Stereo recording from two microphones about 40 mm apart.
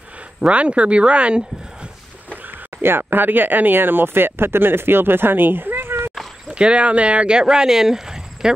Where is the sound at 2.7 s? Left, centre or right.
Right.